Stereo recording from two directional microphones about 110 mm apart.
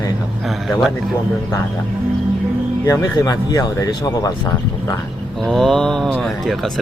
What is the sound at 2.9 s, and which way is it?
Speech, 35° left (ahead or behind).